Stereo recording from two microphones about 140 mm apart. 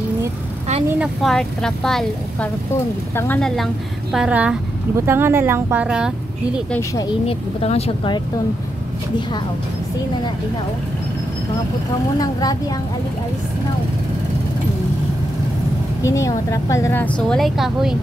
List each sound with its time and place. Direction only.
0.8 s speech: 10° right (ahead or behind)
1.3 s a woman's voice: 5° left (ahead or behind)
7.2 s speech: 45° left (ahead or behind)
12.2 s a woman's voice: 25° left (ahead or behind)
16.0 s a woman's voice: 20° left (ahead or behind); by 17.9 s centre (ahead or behind)